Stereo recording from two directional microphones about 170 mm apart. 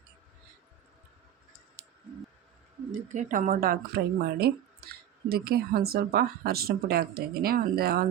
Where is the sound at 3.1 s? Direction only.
45° right (ahead or behind).